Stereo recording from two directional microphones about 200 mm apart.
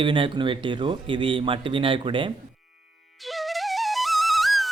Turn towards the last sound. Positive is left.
turn(degrees=0)  # may be behind; listen again after turning